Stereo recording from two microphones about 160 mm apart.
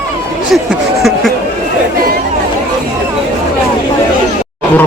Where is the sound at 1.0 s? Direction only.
Centre (ahead or behind).